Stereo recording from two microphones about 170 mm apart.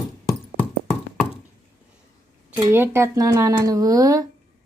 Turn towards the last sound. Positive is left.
turn(degrees=-20)  # may be behind; listen again after turning